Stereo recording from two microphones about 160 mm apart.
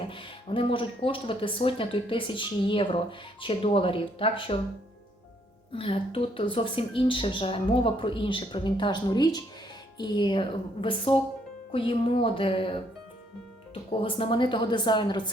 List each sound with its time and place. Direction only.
0.0 s speech: 35° left (ahead or behind)
5.7 s speech: 35° left (ahead or behind)
14.0 s speech: 35° left (ahead or behind)